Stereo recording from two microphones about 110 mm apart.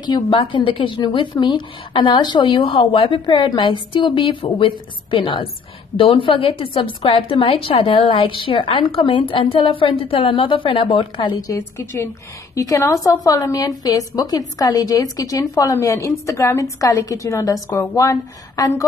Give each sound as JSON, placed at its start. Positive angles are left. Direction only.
{"t": 0.0, "sound": "a woman's voice", "side_deg": 45}
{"t": 11.4, "sound": "a woman's voice", "side_deg": 25}